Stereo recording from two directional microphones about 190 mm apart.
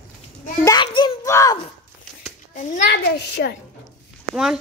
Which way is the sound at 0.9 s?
20° left (ahead or behind).